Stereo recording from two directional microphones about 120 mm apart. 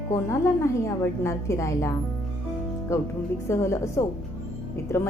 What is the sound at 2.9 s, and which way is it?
A woman's voice, 25° left (ahead or behind).